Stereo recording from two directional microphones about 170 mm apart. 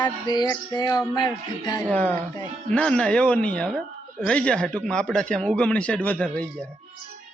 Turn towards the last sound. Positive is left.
turn(degrees=10)  # may be behind; listen again after turning